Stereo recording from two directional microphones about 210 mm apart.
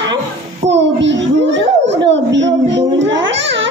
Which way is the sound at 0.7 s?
60° right (ahead or behind).